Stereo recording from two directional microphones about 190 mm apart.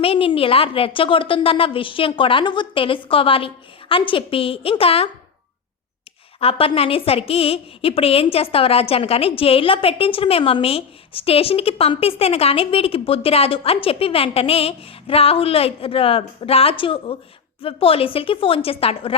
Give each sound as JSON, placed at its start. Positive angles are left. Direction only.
{"t": 0.0, "sound": "a woman's voice", "side_deg": 30}
{"t": 6.4, "sound": "a woman's voice", "side_deg": 30}